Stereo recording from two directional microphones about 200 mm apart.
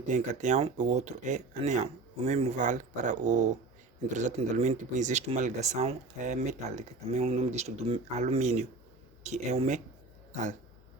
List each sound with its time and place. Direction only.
0.1 s speech: 35° right (ahead or behind)